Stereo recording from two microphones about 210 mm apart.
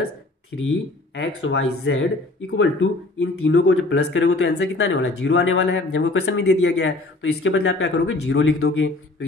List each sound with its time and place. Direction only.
1.1 s speech: 55° left (ahead or behind)